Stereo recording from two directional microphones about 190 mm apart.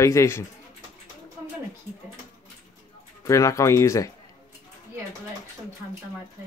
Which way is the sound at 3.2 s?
15° left (ahead or behind).